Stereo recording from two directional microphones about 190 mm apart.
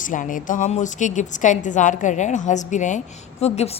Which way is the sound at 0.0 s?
45° left (ahead or behind).